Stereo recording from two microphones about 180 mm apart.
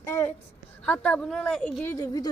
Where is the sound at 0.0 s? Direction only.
15° left (ahead or behind).